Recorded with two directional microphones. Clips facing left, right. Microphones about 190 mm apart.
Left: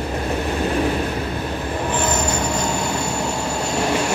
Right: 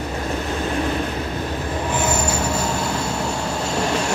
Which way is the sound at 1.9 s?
10° right (ahead or behind).